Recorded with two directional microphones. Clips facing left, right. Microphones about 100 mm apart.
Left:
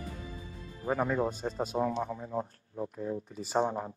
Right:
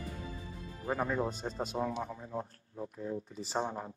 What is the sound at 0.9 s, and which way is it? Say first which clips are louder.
Speech: left 3 dB; 10° left (ahead or behind).